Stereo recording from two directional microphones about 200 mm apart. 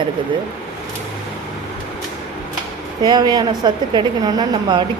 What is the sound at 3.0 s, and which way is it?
A woman's voice, 20° right (ahead or behind).